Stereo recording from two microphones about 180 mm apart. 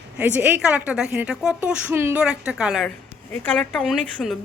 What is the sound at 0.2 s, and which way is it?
A woman's voice, 10° right (ahead or behind).